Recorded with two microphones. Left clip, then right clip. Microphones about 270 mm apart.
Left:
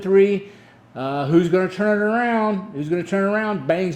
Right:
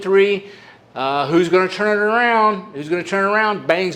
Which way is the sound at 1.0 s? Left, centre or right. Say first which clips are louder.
Right 3 dB; right.